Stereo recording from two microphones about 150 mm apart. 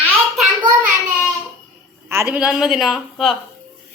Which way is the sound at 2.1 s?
15° right (ahead or behind).